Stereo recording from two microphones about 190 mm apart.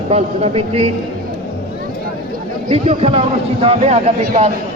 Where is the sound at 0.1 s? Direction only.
35° right (ahead or behind).